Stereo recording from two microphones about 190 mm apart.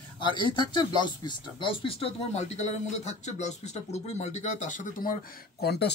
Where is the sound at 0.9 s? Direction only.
25° left (ahead or behind).